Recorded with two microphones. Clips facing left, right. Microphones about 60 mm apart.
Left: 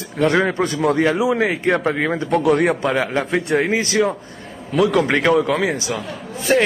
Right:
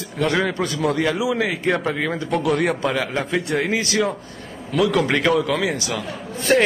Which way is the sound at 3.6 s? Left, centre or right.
Left.